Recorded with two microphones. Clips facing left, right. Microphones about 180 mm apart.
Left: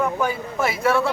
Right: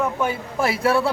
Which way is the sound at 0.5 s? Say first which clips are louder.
Right 1 dB; 35° right (ahead or behind).